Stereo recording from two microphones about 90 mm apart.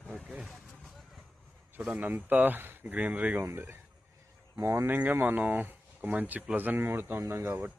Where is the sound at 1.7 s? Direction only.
15° right (ahead or behind).